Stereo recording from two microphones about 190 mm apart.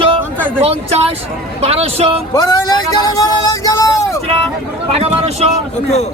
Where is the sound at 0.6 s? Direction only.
35° right (ahead or behind).